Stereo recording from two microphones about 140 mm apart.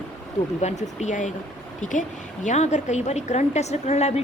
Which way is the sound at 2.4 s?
55° left (ahead or behind).